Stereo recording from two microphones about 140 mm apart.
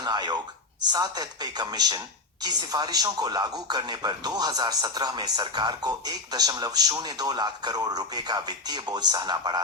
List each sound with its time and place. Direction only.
0.0 s speech: 30° right (ahead or behind)